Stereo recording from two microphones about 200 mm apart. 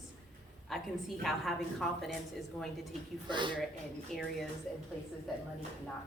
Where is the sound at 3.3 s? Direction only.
25° right (ahead or behind).